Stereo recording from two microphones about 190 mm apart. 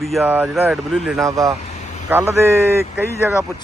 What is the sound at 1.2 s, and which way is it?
Speech, 15° right (ahead or behind).